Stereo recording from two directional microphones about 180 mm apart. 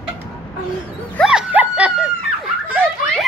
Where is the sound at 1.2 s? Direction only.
5° right (ahead or behind).